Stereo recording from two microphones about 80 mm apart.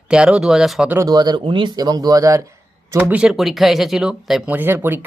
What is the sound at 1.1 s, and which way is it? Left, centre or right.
Speech, right.